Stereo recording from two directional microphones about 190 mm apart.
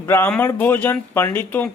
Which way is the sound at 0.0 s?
10° left (ahead or behind).